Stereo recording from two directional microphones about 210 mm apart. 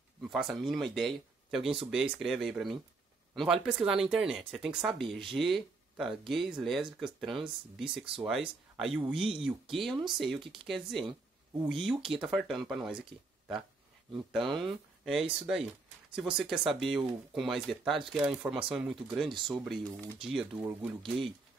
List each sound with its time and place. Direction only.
0.2 s speech: centre (ahead or behind)
10.4 s speech: 25° right (ahead or behind)
10.7 s speech: centre (ahead or behind)
14.3 s speech: centre (ahead or behind)